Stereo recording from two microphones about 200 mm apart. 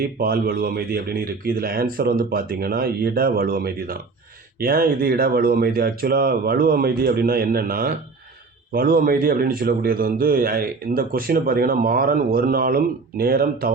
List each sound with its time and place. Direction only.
0.0 s a man's voice: 50° right (ahead or behind)